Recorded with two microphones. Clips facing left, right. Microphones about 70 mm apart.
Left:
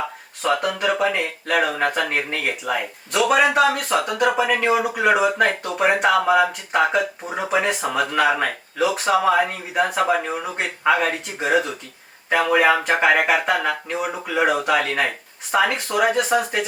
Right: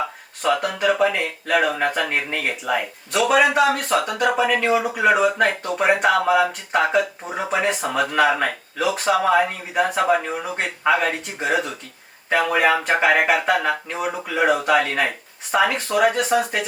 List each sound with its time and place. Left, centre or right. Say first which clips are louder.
0.4 s speech: right 1 dB; centre